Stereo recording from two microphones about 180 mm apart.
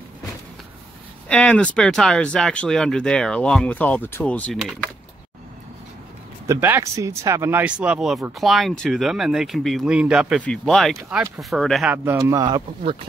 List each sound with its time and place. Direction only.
1.3 s speech: 5° left (ahead or behind)
6.4 s speech: 15° right (ahead or behind)
12.0 s speech: 15° right (ahead or behind)